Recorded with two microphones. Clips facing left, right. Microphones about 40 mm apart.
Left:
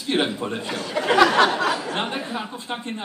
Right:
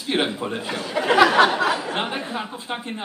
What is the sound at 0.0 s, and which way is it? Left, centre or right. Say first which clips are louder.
Speech: even; centre.